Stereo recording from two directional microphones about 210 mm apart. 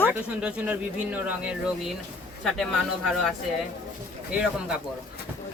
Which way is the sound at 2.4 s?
Centre (ahead or behind).